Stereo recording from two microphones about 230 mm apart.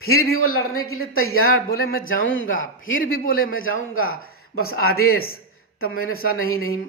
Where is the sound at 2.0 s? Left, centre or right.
Left.